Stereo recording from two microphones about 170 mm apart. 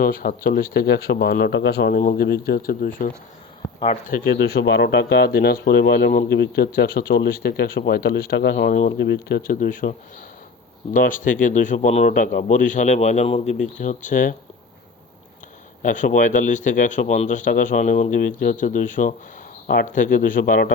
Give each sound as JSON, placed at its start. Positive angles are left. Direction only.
{"t": 0.0, "sound": "speech", "side_deg": 55}
{"t": 2.0, "sound": "speech", "side_deg": 55}
{"t": 4.4, "sound": "speech", "side_deg": 80}
{"t": 6.3, "sound": "speech", "side_deg": 70}
{"t": 10.9, "sound": "a man's voice", "side_deg": 50}
{"t": 15.8, "sound": "a man's voice", "side_deg": 50}
{"t": 19.6, "sound": "speech", "side_deg": 70}
{"t": 19.9, "sound": "a man's voice", "side_deg": 50}